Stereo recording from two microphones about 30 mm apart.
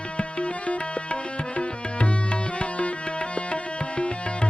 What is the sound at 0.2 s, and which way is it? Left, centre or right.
Music, left.